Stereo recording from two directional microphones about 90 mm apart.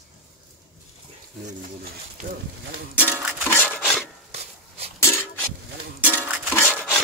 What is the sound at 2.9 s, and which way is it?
Music, 20° left (ahead or behind).